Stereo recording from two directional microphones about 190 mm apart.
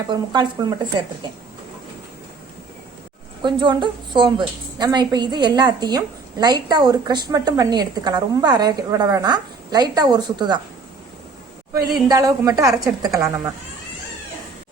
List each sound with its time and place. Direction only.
0.1 s a woman's voice: 25° right (ahead or behind)
3.4 s a woman's voice: 25° right (ahead or behind)
11.7 s a woman's voice: 20° right (ahead or behind)